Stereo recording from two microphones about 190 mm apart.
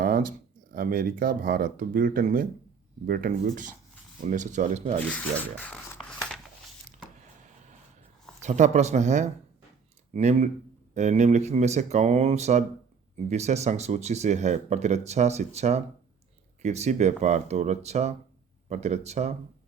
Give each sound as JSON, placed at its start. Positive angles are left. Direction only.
{"t": 0.0, "sound": "speech", "side_deg": -45}
{"t": 5.1, "sound": "a sound", "side_deg": 5}
{"t": 8.4, "sound": "speech", "side_deg": -40}